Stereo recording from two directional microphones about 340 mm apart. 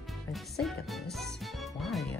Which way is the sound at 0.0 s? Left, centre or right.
Centre.